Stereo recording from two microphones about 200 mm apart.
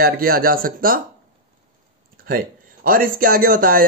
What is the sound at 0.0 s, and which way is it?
Speech, 50° right (ahead or behind).